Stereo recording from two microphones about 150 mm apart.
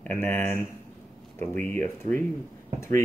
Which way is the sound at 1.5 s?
10° left (ahead or behind).